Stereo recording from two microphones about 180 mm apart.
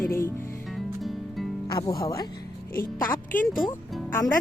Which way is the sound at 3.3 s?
50° left (ahead or behind).